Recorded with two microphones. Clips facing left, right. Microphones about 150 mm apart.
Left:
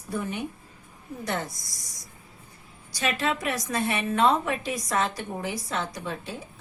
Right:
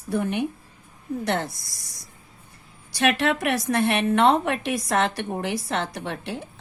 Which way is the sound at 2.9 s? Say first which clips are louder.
Right 5 dB; 70° right (ahead or behind).